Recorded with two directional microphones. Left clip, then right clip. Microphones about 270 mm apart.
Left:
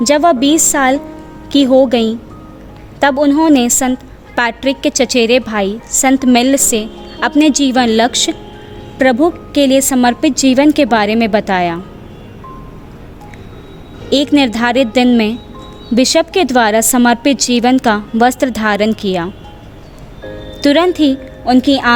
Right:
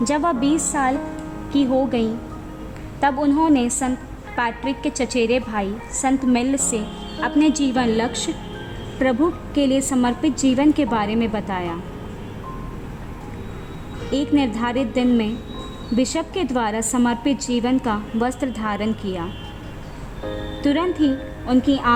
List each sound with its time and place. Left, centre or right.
0.0 s a woman's voice: left
14.1 s a woman's voice: left
20.6 s a woman's voice: left